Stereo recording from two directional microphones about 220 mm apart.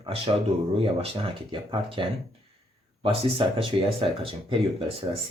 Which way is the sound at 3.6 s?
25° right (ahead or behind).